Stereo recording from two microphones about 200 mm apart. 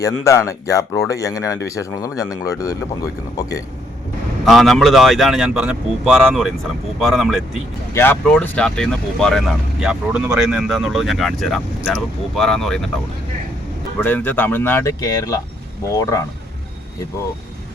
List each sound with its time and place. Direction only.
0.0 s speech: 15° left (ahead or behind)
4.4 s speech: centre (ahead or behind)
7.9 s speech: 10° left (ahead or behind)
14.0 s speech: 10° left (ahead or behind)